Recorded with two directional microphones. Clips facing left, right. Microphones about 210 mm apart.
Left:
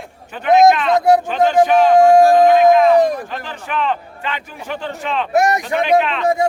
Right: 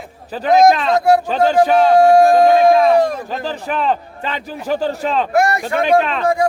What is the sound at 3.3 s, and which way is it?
A man's voice, 35° right (ahead or behind).